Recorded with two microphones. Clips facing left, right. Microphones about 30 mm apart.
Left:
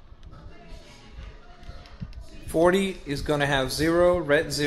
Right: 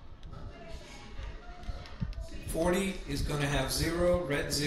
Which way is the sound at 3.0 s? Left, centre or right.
Left.